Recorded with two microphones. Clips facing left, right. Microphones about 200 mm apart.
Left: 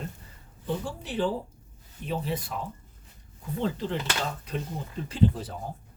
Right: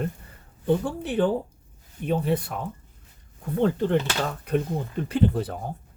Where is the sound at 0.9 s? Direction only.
55° right (ahead or behind).